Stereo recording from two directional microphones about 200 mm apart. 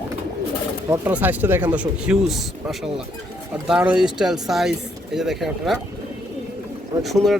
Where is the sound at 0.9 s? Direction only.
10° right (ahead or behind).